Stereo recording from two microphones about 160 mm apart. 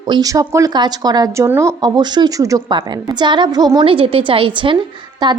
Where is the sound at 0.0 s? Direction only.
25° right (ahead or behind).